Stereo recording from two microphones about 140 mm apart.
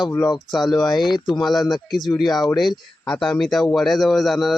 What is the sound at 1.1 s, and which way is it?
Speech, 30° left (ahead or behind).